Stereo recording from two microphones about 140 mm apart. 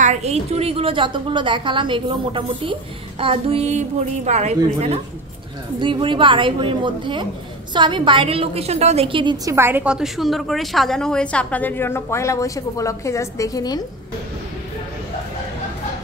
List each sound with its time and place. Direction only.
0.0 s a woman's voice: 55° right (ahead or behind)
5.8 s a woman's voice: 35° right (ahead or behind); by 13.8 s 25° left (ahead or behind)